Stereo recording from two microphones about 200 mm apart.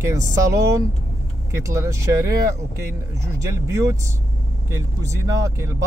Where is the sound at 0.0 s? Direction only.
15° right (ahead or behind).